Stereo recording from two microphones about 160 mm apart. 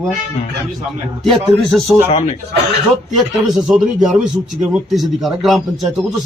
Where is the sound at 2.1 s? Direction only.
40° left (ahead or behind).